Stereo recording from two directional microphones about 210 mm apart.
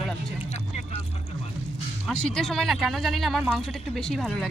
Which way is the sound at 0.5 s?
30° left (ahead or behind).